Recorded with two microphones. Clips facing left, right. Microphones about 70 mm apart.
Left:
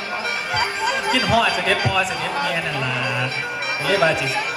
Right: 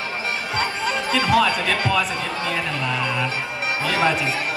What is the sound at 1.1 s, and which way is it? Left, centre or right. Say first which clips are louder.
Speech: right 1 dB; right.